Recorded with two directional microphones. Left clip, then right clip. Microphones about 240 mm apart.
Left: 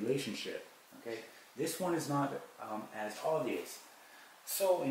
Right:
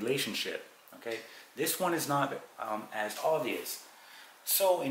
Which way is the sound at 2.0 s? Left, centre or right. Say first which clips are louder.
Right 5 dB; centre.